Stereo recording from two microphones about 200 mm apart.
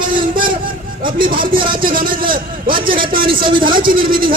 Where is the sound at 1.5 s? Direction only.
25° right (ahead or behind).